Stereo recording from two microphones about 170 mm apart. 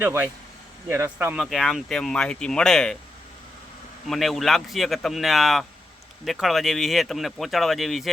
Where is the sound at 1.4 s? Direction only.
Centre (ahead or behind).